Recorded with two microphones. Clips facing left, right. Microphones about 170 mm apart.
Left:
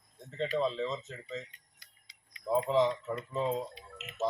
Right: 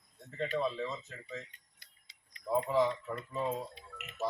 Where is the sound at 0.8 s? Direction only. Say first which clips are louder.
Left 4 dB; 20° left (ahead or behind).